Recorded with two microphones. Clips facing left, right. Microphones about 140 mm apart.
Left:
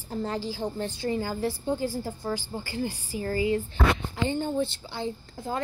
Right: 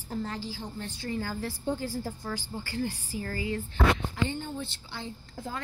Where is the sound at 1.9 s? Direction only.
25° left (ahead or behind).